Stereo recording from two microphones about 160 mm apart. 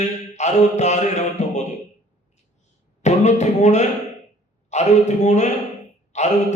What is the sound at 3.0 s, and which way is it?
Mantra, 45° left (ahead or behind).